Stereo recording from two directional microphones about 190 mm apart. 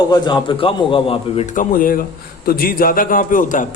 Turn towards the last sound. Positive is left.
turn(degrees=45)  # may be behind; listen again after turning